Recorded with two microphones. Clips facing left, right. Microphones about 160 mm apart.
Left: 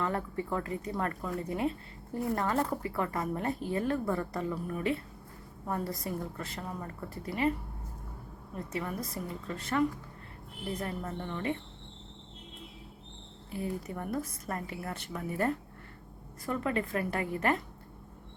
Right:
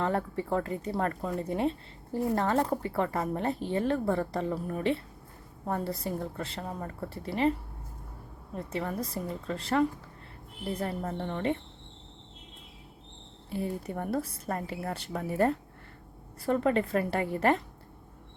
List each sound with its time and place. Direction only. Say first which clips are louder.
0.3 s a woman's voice: right 3 dB; 30° right (ahead or behind)
8.5 s speech: right 3 dB; 30° right (ahead or behind)
13.5 s speech: right 3 dB; 30° right (ahead or behind)